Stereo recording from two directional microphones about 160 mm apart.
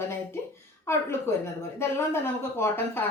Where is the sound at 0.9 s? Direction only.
15° left (ahead or behind).